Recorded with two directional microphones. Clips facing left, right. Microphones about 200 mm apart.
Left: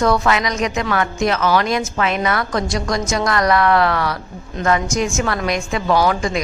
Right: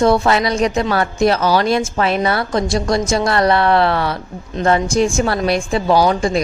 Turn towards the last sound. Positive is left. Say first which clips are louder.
# right 3 dB
turn(degrees=-30)  # may be behind; listen again after turning